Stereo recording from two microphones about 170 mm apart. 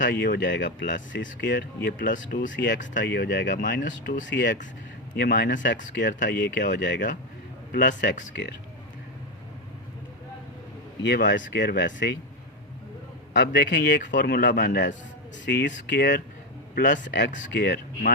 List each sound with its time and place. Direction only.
0.0 s speech: 65° left (ahead or behind)
2.6 s speech: 60° left (ahead or behind)
4.3 s speech: 70° left (ahead or behind)
6.1 s a man's voice: 60° left (ahead or behind)
11.0 s speech: 85° left
13.3 s speech: 85° left
16.7 s a man's voice: 50° left (ahead or behind)
17.1 s speech: 90° left